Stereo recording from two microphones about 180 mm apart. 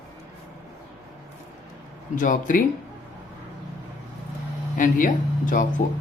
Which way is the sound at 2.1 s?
45° left (ahead or behind).